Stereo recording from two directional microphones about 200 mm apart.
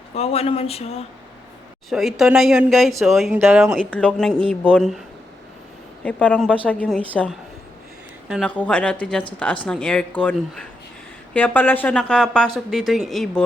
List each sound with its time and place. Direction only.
0.1 s speech: 30° left (ahead or behind)
1.9 s speech: centre (ahead or behind)
6.1 s speech: 5° left (ahead or behind)
8.3 s speech: 5° left (ahead or behind)
11.3 s speech: 10° left (ahead or behind)